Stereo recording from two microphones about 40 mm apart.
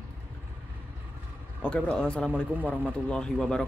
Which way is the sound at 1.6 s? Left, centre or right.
Left.